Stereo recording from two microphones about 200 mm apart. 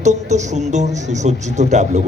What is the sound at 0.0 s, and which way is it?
Speech, 35° right (ahead or behind).